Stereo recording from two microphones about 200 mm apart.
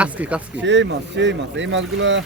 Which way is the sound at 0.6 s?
65° right (ahead or behind).